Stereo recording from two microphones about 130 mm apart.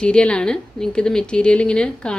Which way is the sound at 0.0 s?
10° left (ahead or behind).